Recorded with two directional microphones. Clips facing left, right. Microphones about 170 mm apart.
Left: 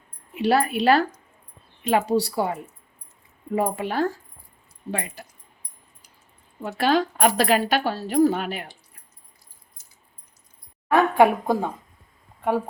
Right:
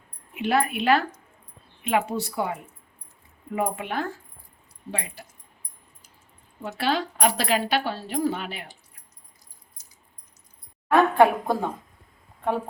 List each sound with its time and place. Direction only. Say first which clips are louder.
0.3 s speech: left 3 dB; 35° left (ahead or behind)
4.9 s a woman's voice: left 4 dB; 50° left (ahead or behind)
6.7 s a woman's voice: left 5 dB; 45° left (ahead or behind)
10.9 s a woman's voice: left 1 dB; 10° left (ahead or behind)